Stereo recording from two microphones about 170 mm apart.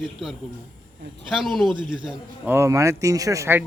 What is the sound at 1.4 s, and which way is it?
A man's voice, centre (ahead or behind).